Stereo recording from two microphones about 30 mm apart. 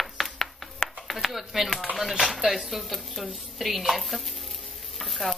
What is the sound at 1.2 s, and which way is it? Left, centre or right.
Speech, centre.